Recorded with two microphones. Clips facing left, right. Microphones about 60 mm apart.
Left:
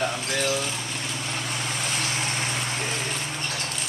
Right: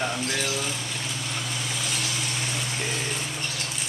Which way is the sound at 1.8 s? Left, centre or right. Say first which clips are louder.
Left 3 dB; left.